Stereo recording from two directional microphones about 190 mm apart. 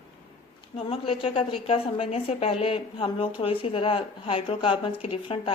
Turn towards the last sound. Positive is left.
turn(degrees=30)  # may be behind; listen again after turning